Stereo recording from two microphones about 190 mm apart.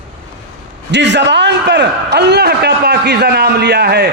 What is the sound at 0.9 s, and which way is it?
A man's voice, 65° right (ahead or behind).